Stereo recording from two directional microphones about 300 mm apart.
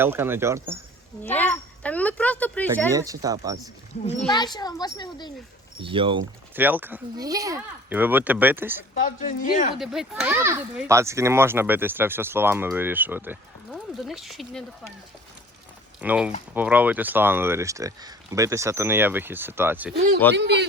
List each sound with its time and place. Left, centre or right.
0.0 s a child's voice: centre
1.2 s speech: centre
2.9 s a child's voice: centre
4.3 s a child's voice: centre
5.8 s a child's voice: centre
6.6 s a child's voice: centre
9.0 s speech: left
9.7 s a child's voice: centre
16.0 s a child's voice: centre
20.3 s a man's voice: right